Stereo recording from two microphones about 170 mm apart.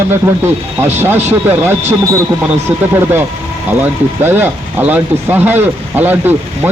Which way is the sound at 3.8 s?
10° right (ahead or behind).